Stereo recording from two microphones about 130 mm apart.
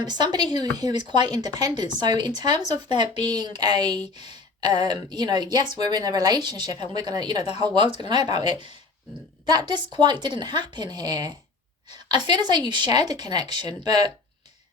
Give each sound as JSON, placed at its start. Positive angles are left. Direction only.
{"t": 0.0, "sound": "a woman's voice", "side_deg": -35}